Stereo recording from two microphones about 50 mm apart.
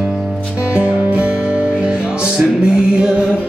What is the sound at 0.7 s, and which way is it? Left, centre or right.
Music, right.